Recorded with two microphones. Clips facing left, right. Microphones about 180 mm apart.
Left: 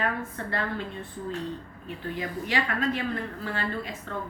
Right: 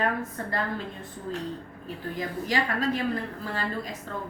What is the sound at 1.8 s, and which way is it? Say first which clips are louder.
A woman's voice: even; 40° right (ahead or behind).